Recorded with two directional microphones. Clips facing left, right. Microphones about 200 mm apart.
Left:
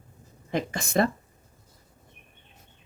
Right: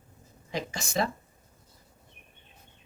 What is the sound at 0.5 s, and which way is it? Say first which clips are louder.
Speech: left 6 dB; 55° left (ahead or behind).